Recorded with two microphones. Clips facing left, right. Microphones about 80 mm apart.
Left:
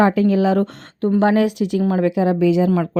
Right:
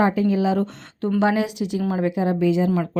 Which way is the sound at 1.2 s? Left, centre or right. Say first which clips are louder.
Left 4 dB; left.